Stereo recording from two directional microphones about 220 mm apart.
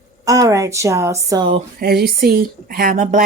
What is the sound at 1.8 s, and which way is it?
Speech, 45° right (ahead or behind).